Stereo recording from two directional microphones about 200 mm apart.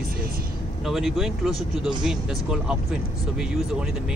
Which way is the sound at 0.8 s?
Centre (ahead or behind).